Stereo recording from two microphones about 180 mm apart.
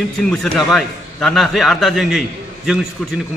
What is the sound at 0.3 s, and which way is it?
A man's voice, centre (ahead or behind).